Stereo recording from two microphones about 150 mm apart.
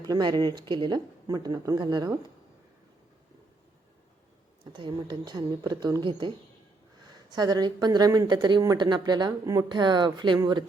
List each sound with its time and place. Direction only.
0.1 s speech: 30° right (ahead or behind)
4.7 s speech: 30° right (ahead or behind)